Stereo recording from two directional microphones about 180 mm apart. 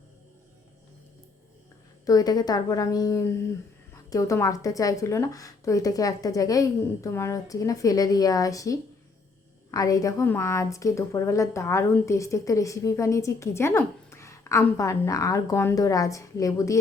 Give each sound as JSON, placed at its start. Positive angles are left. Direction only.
{"t": 2.0, "sound": "a woman's voice", "side_deg": 20}